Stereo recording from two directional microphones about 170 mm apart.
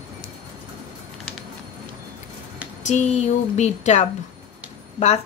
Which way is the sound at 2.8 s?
40° left (ahead or behind).